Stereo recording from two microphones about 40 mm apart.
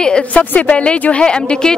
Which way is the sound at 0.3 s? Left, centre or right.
Left.